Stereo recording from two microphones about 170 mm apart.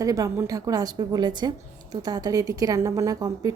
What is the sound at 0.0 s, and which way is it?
A woman's voice, 20° right (ahead or behind).